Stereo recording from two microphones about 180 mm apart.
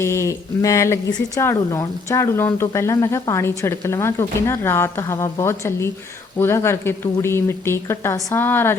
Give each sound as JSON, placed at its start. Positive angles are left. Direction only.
{"t": 0.0, "sound": "speech", "side_deg": 15}